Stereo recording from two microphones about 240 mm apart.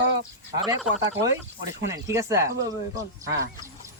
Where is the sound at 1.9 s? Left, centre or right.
Centre.